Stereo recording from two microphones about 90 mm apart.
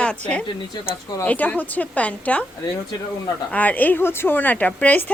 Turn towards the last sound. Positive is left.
turn(degrees=15)  # may be behind; listen again after turning